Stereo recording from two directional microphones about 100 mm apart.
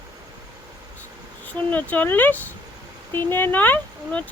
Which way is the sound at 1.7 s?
15° left (ahead or behind).